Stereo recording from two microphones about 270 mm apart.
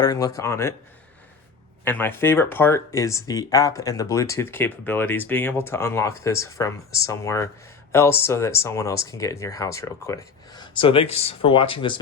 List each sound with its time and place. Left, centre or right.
0.0 s speech: centre
1.8 s speech: centre